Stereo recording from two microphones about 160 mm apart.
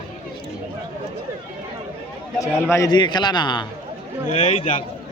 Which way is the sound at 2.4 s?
20° left (ahead or behind).